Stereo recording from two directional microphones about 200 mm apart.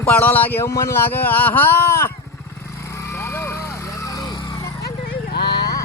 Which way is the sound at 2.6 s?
15° left (ahead or behind).